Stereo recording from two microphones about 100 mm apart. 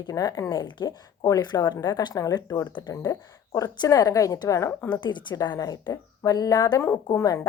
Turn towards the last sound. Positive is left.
turn(degrees=35)  # may be behind; listen again after turning